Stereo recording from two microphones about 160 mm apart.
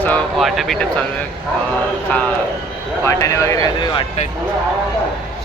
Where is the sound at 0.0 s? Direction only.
10° left (ahead or behind).